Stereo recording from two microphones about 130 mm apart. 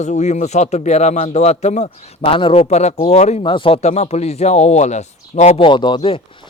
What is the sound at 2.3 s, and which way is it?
Speech, 45° left (ahead or behind).